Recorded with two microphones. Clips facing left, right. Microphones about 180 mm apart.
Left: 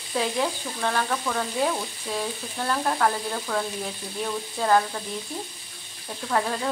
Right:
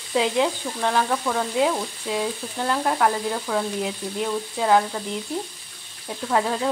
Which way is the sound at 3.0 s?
10° right (ahead or behind).